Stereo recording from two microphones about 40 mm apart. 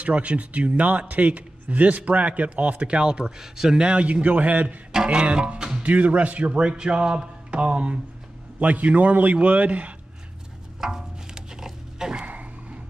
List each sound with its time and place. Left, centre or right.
0.0 s a man's voice: right; by 3.8 s centre
3.8 s a man's voice: right
4.9 s a man's voice: right
5.8 s a man's voice: right
8.5 s a man's voice: right
10.8 s music: centre
12.3 s a sound: right